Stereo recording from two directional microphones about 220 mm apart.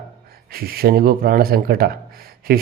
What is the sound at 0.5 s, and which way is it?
Speech, 45° right (ahead or behind).